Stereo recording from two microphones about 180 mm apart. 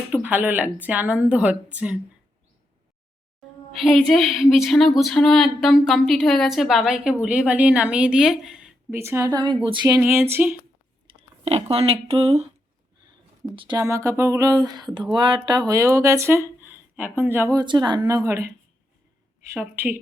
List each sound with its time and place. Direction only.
0.1 s speech: 10° right (ahead or behind)
3.7 s a woman's voice: centre (ahead or behind)
8.9 s speech: 15° right (ahead or behind)
9.8 s speech: 10° right (ahead or behind)
11.4 s speech: 35° right (ahead or behind)
13.6 s speech: 20° right (ahead or behind)
19.5 s speech: 10° right (ahead or behind)